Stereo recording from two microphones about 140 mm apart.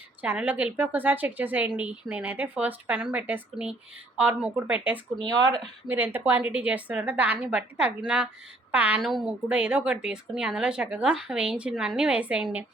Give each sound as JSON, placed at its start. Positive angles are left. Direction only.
{"t": 0.2, "sound": "a woman's voice", "side_deg": -10}
{"t": 5.2, "sound": "speech", "side_deg": -30}
{"t": 5.9, "sound": "a woman's voice", "side_deg": -15}